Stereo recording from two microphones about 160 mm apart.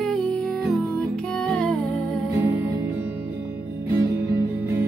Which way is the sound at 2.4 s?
15° right (ahead or behind).